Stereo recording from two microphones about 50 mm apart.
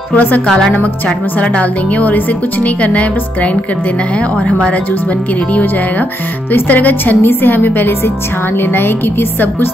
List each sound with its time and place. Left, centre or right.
0.5 s speech: centre
0.7 s a woman's voice: left
4.5 s a woman's voice: left